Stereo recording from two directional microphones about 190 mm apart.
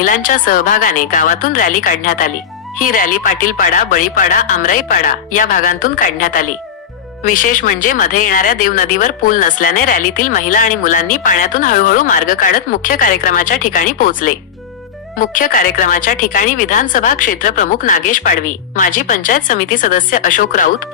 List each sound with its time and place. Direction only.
0.0 s speech: 45° left (ahead or behind)